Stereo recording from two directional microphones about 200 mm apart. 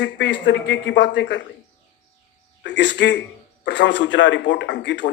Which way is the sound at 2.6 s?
60° left (ahead or behind).